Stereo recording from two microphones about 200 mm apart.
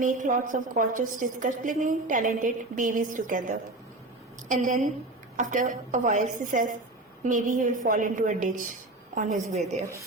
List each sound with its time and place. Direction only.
0.0 s a woman's voice: 40° right (ahead or behind)